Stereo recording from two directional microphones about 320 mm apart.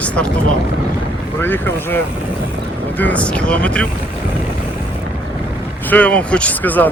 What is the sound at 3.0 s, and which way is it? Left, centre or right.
Speech, centre.